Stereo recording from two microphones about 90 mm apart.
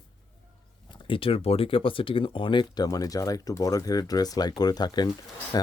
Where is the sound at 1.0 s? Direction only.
80° left.